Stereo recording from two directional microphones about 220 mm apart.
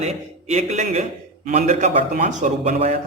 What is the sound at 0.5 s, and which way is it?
A man's voice, 30° right (ahead or behind).